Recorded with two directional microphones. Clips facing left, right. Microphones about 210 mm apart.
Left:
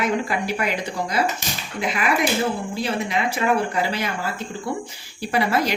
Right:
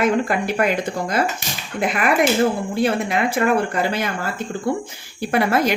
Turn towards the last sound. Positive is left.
turn(degrees=-50)  # may be behind; listen again after turning